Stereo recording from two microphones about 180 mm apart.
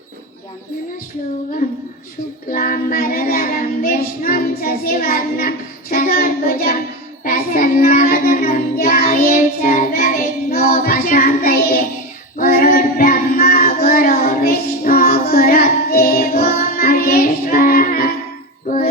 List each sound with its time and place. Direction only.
2.5 s child singing: 50° left (ahead or behind)